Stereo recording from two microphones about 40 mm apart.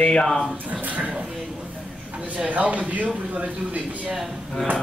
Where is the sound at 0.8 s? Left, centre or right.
Right.